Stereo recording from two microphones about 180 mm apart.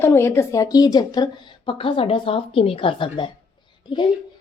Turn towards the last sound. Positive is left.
turn(degrees=25)  # may be behind; listen again after turning